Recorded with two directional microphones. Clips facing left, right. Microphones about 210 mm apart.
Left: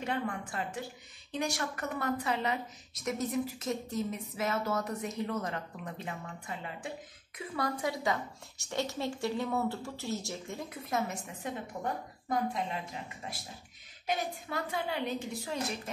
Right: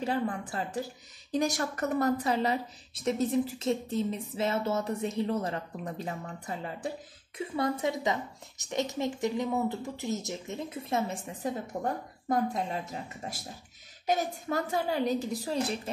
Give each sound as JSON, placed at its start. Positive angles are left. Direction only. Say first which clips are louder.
{"t": 0.0, "sound": "a woman's voice", "louder": "right 4 dB", "side_deg": -35}
{"t": 7.3, "sound": "a woman's voice", "louder": "right 5 dB", "side_deg": -25}